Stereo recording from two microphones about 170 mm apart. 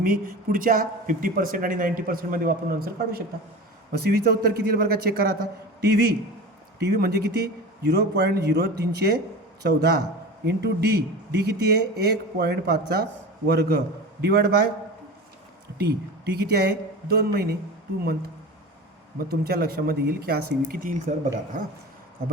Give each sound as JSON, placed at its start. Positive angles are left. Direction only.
{"t": 0.0, "sound": "speech", "side_deg": -55}
{"t": 6.7, "sound": "speech", "side_deg": -70}
{"t": 15.8, "sound": "speech", "side_deg": -65}
{"t": 19.3, "sound": "speech", "side_deg": -65}